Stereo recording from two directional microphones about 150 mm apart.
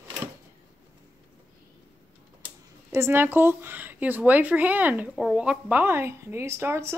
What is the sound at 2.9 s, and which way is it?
Speech, 20° right (ahead or behind).